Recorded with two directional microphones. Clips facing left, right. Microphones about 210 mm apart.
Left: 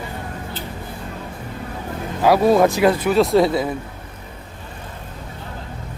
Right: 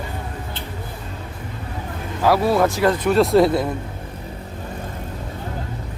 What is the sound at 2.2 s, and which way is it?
Speech, 15° left (ahead or behind).